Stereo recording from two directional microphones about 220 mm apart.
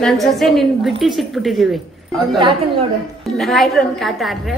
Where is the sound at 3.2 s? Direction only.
Centre (ahead or behind).